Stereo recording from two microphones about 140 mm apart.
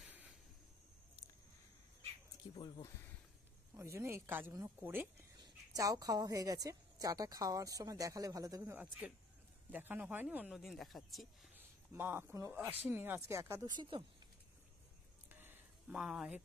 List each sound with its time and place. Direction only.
2.5 s speech: 35° left (ahead or behind)
3.7 s a woman's voice: 20° right (ahead or behind)
8.7 s speech: 10° right (ahead or behind)
11.5 s speech: 15° right (ahead or behind)
13.7 s speech: 30° right (ahead or behind)
15.2 s a sound: 15° right (ahead or behind)
16.0 s speech: 5° right (ahead or behind)